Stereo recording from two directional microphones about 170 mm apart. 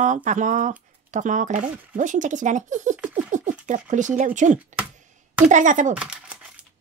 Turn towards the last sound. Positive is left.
turn(degrees=-5)  # may be behind; listen again after turning